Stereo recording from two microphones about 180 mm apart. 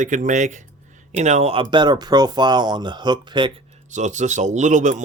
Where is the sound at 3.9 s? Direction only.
40° right (ahead or behind).